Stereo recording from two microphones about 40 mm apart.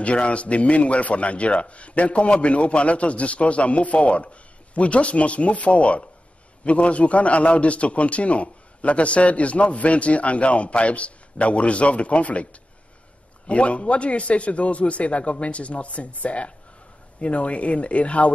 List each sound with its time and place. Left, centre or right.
0.0 s speech: left
13.5 s speech: left